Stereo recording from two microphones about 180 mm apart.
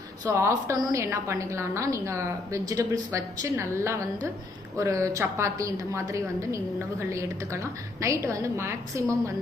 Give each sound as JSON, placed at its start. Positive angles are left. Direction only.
{"t": 0.3, "sound": "a woman's voice", "side_deg": -15}